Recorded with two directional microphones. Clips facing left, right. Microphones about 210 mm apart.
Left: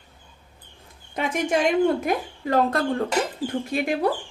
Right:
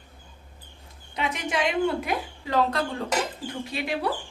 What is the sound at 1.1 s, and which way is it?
A woman's voice, 50° left (ahead or behind).